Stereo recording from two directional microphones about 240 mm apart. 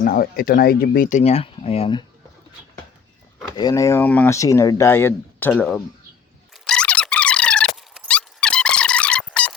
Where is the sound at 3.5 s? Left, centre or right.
Centre.